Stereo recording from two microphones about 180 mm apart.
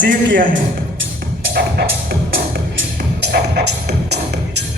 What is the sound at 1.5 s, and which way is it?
Music, 60° right (ahead or behind).